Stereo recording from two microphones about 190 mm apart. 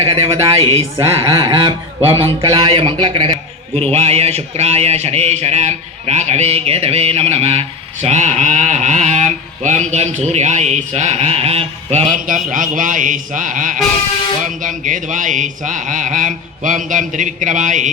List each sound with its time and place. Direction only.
0.6 s speech: 30° right (ahead or behind)
0.9 s a man's voice: 15° right (ahead or behind); by 17.9 s 40° right (ahead or behind)